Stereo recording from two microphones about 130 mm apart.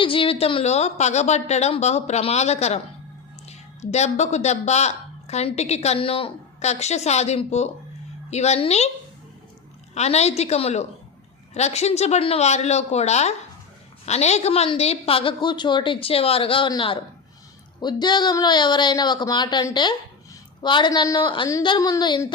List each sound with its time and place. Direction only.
0.0 s a woman's voice: 40° left (ahead or behind)
9.9 s a woman's voice: 55° left (ahead or behind); by 22.2 s 35° left (ahead or behind)